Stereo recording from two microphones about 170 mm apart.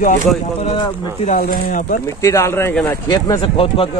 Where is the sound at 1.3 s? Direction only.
55° left (ahead or behind).